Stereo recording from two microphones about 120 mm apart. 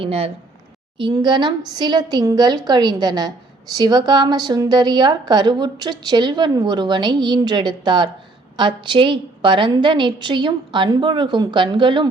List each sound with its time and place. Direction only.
0.0 s speech: 55° right (ahead or behind)
0.9 s a woman's voice: 40° right (ahead or behind)